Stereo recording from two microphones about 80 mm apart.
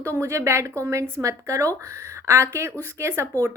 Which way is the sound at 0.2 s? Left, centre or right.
Right.